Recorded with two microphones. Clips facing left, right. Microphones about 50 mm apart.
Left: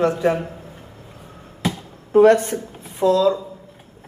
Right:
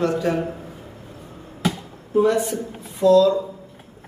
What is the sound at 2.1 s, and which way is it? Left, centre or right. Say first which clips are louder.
Speech: left 6 dB; left.